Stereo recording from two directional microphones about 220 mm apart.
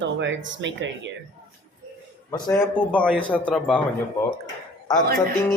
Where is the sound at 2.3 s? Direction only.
10° left (ahead or behind).